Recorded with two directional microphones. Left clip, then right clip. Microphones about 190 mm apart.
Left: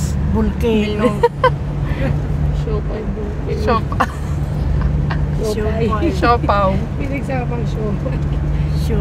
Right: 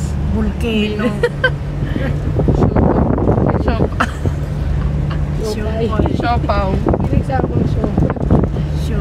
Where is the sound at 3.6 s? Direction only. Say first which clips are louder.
Left 1 dB; 45° left (ahead or behind).